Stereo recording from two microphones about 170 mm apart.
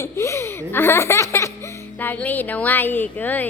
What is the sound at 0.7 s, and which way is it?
Baby laughter, 15° left (ahead or behind).